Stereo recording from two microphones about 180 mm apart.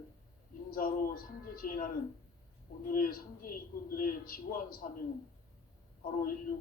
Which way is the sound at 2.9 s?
50° left (ahead or behind).